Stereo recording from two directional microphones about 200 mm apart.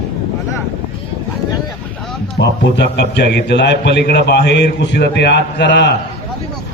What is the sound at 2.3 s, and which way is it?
A man's voice, 60° left (ahead or behind).